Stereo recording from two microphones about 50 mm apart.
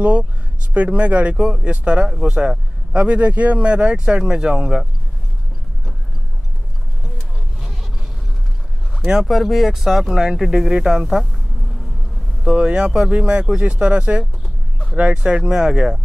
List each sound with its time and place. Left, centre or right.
0.0 s speech: right
2.0 s speech: centre
2.9 s speech: right
9.2 s speech: centre
12.4 s speech: right